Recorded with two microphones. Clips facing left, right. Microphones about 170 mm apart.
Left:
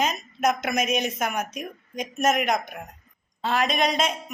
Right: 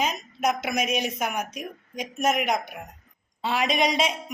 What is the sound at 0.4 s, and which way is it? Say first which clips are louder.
A man's voice: left 2 dB; 10° right (ahead or behind).